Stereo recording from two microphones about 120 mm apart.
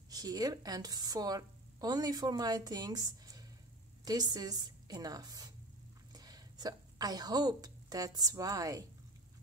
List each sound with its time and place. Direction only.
0.1 s a woman's voice: 30° right (ahead or behind)